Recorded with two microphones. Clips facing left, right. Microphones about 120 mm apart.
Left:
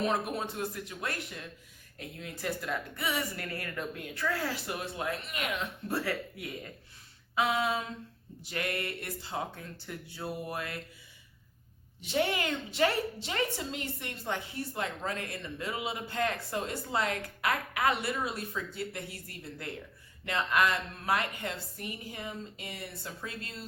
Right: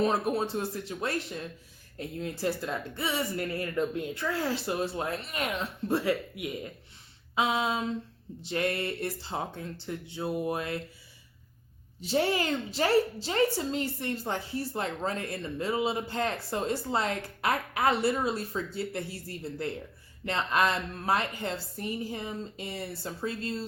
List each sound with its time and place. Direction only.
0.0 s a woman's voice: 30° right (ahead or behind)
5.9 s speech: 20° right (ahead or behind)
11.9 s a woman's voice: 35° right (ahead or behind)